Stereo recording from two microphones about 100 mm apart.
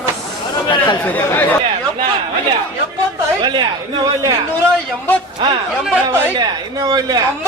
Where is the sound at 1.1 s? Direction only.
20° left (ahead or behind).